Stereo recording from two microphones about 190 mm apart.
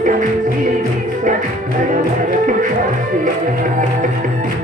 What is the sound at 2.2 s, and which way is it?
Music, 45° right (ahead or behind).